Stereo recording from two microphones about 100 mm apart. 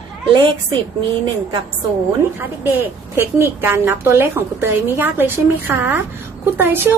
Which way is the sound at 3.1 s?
25° right (ahead or behind).